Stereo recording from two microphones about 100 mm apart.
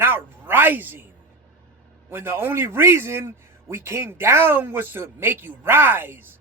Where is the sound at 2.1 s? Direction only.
20° right (ahead or behind).